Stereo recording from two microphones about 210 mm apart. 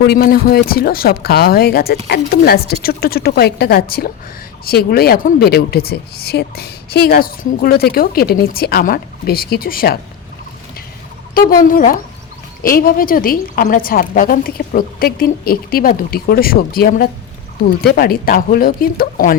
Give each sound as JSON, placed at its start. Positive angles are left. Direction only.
{"t": 0.0, "sound": "speech", "side_deg": 50}
{"t": 11.3, "sound": "speech", "side_deg": 45}